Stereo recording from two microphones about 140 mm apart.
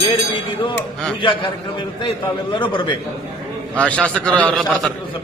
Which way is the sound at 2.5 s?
35° left (ahead or behind).